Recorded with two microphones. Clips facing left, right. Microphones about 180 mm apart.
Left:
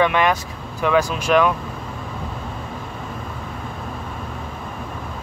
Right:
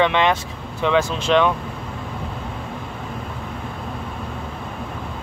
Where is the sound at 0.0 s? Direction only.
25° right (ahead or behind).